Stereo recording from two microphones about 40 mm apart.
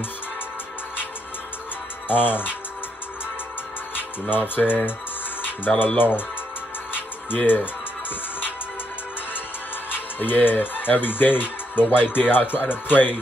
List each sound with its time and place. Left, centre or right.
2.0 s speech: left
4.4 s speech: left
5.9 s speech: left
6.9 s music: left
10.1 s speech: left